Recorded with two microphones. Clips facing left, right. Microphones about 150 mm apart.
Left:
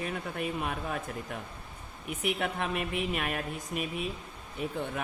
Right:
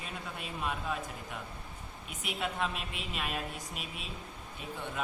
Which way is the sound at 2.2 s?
60° left (ahead or behind).